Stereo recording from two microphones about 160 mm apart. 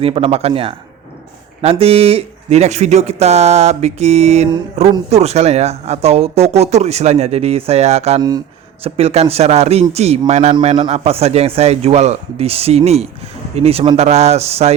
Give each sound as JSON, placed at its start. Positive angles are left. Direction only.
{"t": 0.0, "sound": "a man's voice", "side_deg": -35}